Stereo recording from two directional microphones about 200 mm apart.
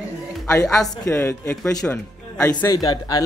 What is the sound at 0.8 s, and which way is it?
Speech, 15° left (ahead or behind).